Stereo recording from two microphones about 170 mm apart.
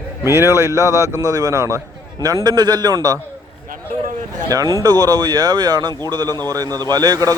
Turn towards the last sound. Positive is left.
turn(degrees=-20)  # may be behind; listen again after turning